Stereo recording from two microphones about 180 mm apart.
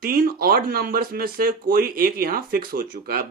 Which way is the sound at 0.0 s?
55° right (ahead or behind).